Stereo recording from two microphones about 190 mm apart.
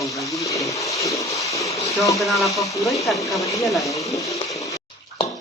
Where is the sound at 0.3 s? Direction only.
15° left (ahead or behind).